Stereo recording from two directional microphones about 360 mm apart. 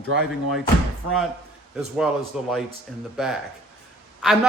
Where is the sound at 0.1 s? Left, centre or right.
Right.